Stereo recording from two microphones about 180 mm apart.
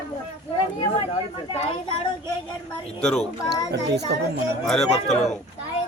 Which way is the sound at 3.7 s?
65° right (ahead or behind).